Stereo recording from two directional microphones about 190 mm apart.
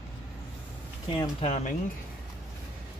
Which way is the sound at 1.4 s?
35° left (ahead or behind).